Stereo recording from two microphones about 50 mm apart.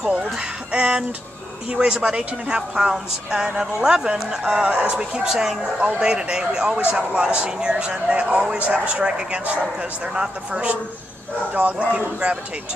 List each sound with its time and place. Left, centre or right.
0.0 s speech: right